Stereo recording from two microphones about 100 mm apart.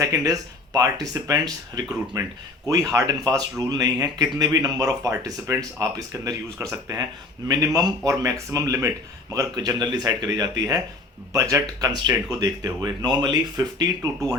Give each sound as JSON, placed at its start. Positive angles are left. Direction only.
{"t": 0.0, "sound": "speech", "side_deg": -35}